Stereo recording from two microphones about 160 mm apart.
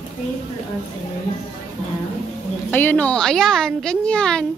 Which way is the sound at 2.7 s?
10° left (ahead or behind).